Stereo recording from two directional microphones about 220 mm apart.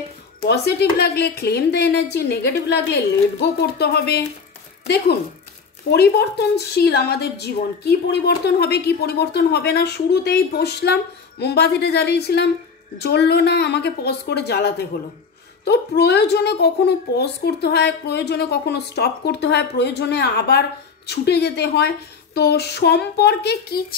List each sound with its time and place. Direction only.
0.4 s a woman's voice: 50° left (ahead or behind)
5.9 s a woman's voice: 45° left (ahead or behind)